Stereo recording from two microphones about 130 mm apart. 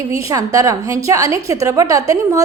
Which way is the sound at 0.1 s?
25° right (ahead or behind).